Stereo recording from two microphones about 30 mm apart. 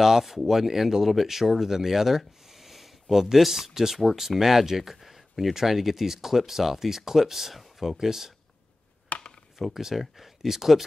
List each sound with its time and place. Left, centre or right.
0.0 s speech: centre
4.9 s a sound: centre
5.5 s speech: centre
8.0 s speech: centre
9.1 s a sound: left
9.8 s speech: centre